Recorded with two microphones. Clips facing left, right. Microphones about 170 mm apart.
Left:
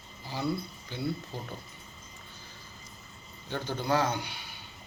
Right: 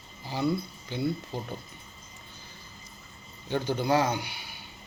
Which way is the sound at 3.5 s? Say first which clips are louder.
Right 4 dB; 15° right (ahead or behind).